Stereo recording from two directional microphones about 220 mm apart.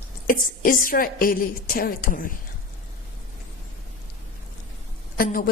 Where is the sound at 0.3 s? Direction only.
40° left (ahead or behind).